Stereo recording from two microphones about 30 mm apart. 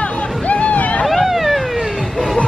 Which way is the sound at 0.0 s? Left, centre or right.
Left.